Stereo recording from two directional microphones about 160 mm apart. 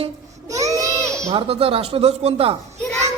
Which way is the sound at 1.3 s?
35° right (ahead or behind).